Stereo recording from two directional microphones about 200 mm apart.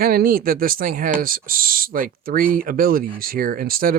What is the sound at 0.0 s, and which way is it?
Speech, 45° right (ahead or behind).